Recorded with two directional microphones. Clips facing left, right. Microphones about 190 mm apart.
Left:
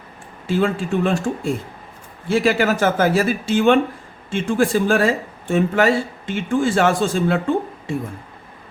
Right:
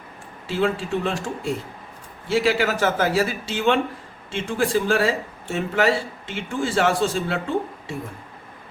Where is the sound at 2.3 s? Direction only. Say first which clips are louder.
Left 3 dB; 50° left (ahead or behind).